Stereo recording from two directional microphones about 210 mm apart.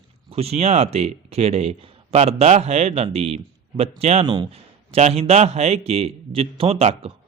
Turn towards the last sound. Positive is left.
turn(degrees=-30)  # may be behind; listen again after turning